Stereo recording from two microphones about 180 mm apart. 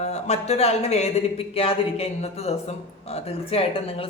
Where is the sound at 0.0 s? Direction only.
35° left (ahead or behind).